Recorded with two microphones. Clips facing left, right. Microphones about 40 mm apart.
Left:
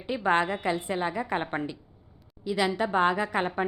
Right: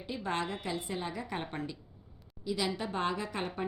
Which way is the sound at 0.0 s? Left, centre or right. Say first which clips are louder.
Left 10 dB; left.